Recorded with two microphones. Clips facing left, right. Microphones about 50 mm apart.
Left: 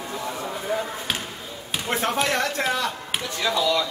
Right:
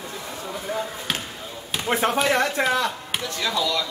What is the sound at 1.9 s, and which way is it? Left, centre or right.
Speech, centre.